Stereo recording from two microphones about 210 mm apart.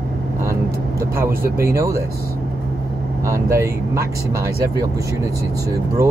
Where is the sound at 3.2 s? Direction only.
15° right (ahead or behind).